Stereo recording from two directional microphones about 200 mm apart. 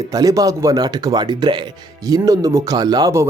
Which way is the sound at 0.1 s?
15° right (ahead or behind).